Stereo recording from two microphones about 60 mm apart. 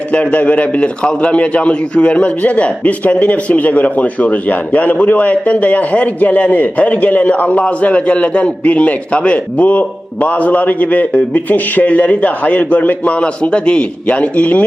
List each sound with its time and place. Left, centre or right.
0.1 s a man's voice: left